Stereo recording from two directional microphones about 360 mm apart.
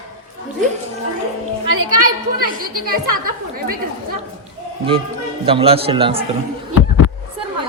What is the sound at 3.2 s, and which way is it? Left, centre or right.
Speech, right.